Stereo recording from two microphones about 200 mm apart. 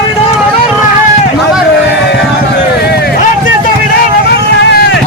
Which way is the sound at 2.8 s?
55° left (ahead or behind).